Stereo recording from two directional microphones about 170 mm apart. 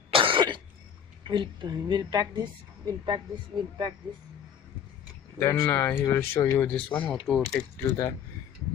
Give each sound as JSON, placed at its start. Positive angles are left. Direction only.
{"t": 0.1, "sound": "cough", "side_deg": -30}
{"t": 1.2, "sound": "a woman's voice", "side_deg": -30}
{"t": 5.4, "sound": "speech", "side_deg": 15}
{"t": 7.8, "sound": "speech", "side_deg": 20}